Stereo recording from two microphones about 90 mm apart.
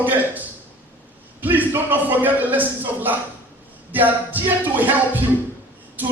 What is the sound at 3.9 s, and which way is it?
Music, 20° right (ahead or behind).